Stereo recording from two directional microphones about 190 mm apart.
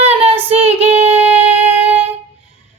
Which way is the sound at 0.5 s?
30° right (ahead or behind).